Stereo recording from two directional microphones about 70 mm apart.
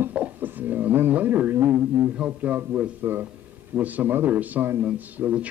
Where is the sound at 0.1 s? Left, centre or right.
Right.